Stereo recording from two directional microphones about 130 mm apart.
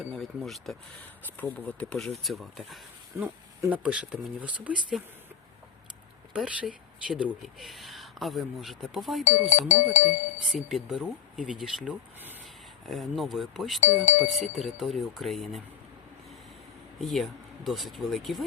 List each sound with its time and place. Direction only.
0.2 s speech: centre (ahead or behind)
1.4 s speech: 15° left (ahead or behind)
3.2 s speech: 15° right (ahead or behind)
6.3 s speech: 5° right (ahead or behind)
9.2 s speech: 70° left (ahead or behind)
10.5 s speech: centre (ahead or behind)
13.8 s speech: 75° left (ahead or behind)
14.5 s speech: centre (ahead or behind)
17.0 s speech: centre (ahead or behind)